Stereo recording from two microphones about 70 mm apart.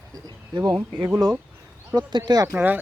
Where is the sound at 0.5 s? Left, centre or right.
Right.